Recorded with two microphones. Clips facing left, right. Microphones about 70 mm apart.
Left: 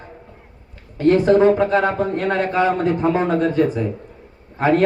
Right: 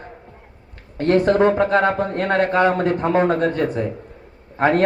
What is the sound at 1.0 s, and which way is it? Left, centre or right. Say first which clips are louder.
A man's voice: left 2 dB; right.